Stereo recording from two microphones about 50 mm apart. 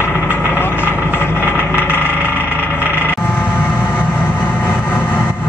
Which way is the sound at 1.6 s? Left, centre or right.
Left.